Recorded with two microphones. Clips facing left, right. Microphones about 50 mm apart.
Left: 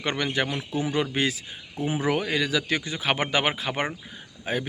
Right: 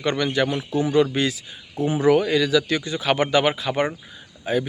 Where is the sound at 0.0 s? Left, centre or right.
Left.